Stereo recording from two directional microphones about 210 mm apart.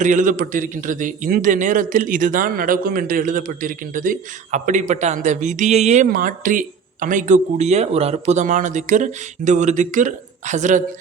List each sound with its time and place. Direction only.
0.0 s a man's voice: 35° right (ahead or behind)